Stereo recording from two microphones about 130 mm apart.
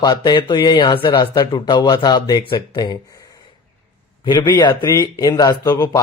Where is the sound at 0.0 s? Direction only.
35° left (ahead or behind).